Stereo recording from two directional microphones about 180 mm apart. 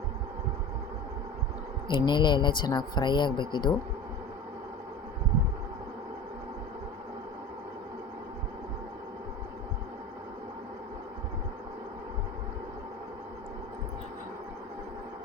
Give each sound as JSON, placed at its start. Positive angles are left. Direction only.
{"t": 1.9, "sound": "speech", "side_deg": 25}